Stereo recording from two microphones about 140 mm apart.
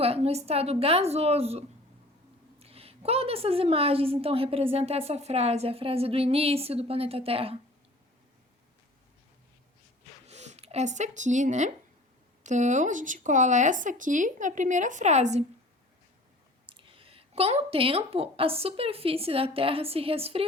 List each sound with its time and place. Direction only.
0.0 s a woman's voice: 45° right (ahead or behind)
10.2 s speech: 55° right (ahead or behind)
16.6 s a woman's voice: 40° right (ahead or behind)